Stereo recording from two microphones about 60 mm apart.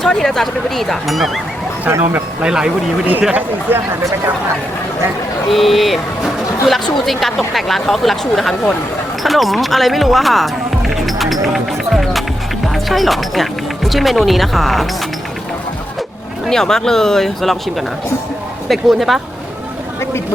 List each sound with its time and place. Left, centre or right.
0.0 s speech: centre
2.4 s speech: centre
3.7 s speech: right
5.5 s speech: centre
16.5 s speech: centre